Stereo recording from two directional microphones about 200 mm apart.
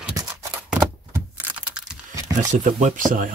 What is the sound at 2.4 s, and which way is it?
Speech, 40° right (ahead or behind).